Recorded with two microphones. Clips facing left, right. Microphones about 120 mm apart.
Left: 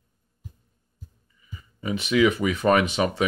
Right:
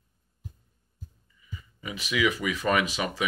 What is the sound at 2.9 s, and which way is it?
Speech, 25° left (ahead or behind).